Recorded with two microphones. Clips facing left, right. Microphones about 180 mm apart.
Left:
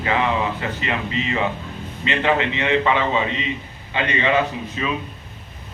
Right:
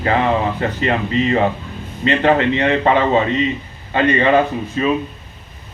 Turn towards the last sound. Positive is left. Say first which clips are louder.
# right 6 dB
turn(degrees=-45)  # may be behind; listen again after turning